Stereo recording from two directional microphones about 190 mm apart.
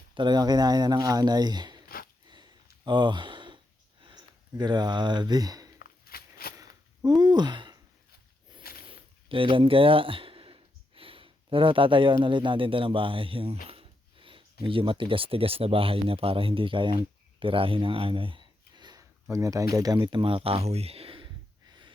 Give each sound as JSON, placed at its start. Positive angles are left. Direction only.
{"t": 0.1, "sound": "speech", "side_deg": -25}
{"t": 2.8, "sound": "sigh", "side_deg": -25}
{"t": 4.0, "sound": "speech", "side_deg": -20}
{"t": 5.8, "sound": "a sound", "side_deg": 50}
{"t": 7.2, "sound": "speech", "side_deg": -20}
{"t": 8.9, "sound": "speech", "side_deg": -25}
{"t": 13.7, "sound": "a sound", "side_deg": -30}
{"t": 14.6, "sound": "speech", "side_deg": -30}
{"t": 21.7, "sound": "gasp", "side_deg": -25}